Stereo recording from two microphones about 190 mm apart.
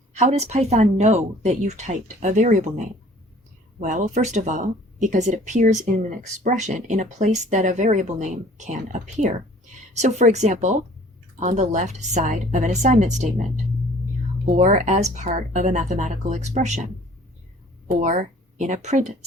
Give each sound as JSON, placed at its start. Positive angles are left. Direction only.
{"t": 0.2, "sound": "speech", "side_deg": -35}
{"t": 14.4, "sound": "speech", "side_deg": -40}
{"t": 17.8, "sound": "a woman's voice", "side_deg": -40}